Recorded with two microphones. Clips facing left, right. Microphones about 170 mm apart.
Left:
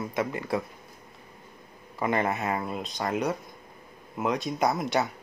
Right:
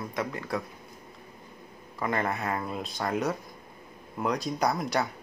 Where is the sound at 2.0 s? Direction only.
10° left (ahead or behind).